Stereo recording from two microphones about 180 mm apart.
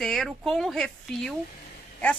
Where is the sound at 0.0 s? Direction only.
Centre (ahead or behind).